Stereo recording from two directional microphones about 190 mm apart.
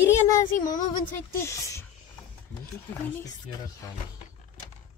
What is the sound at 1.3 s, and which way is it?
Speech, 15° left (ahead or behind).